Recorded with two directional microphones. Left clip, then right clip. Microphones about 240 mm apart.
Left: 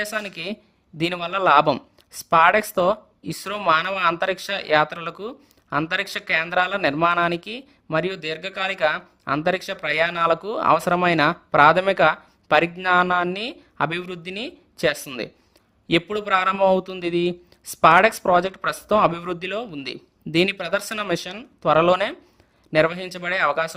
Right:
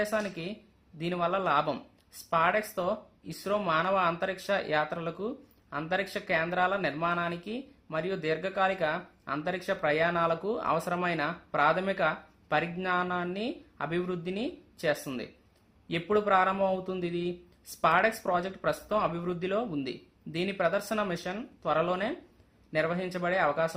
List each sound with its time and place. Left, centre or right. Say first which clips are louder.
0.0 s speech: left 4 dB; left